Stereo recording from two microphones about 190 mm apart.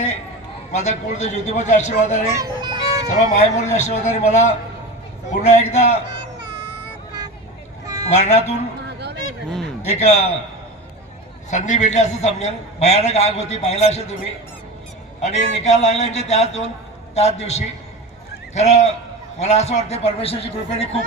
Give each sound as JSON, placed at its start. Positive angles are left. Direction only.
{"t": 0.7, "sound": "a man's voice", "side_deg": 35}
{"t": 2.3, "sound": "a child's voice", "side_deg": -20}
{"t": 3.1, "sound": "a man's voice", "side_deg": 35}
{"t": 7.9, "sound": "meow", "side_deg": -20}
{"t": 8.1, "sound": "a man's voice", "side_deg": 35}
{"t": 8.9, "sound": "a sound", "side_deg": -60}
{"t": 9.8, "sound": "a man's voice", "side_deg": 35}
{"t": 11.5, "sound": "a man's voice", "side_deg": 40}
{"t": 15.2, "sound": "a man's voice", "side_deg": 35}